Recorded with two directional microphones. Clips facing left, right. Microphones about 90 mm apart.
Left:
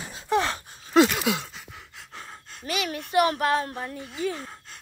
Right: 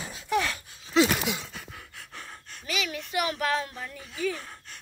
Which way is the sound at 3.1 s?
40° left (ahead or behind).